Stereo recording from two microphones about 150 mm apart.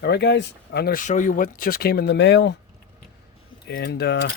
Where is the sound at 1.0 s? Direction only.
60° left (ahead or behind); by 2.1 s 90° left.